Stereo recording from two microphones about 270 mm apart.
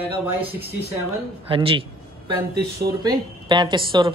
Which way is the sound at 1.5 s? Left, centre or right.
Centre.